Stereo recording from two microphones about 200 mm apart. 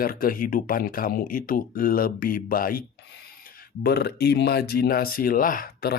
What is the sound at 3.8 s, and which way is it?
Speech, 55° left (ahead or behind).